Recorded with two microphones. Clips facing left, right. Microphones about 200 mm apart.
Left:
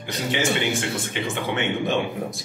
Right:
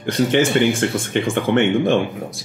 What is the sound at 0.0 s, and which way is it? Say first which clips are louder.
Speech: right 8 dB; 55° right (ahead or behind).